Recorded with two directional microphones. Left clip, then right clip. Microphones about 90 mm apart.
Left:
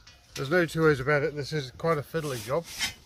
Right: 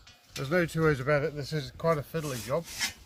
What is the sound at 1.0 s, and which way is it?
Speech, 85° left.